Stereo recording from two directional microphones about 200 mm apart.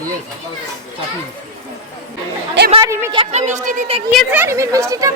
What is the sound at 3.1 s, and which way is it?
Speech, 30° right (ahead or behind).